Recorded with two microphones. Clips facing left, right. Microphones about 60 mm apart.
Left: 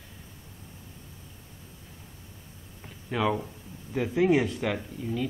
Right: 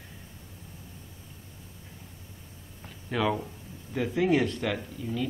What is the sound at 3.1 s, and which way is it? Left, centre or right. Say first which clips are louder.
Speech: left 1 dB; centre.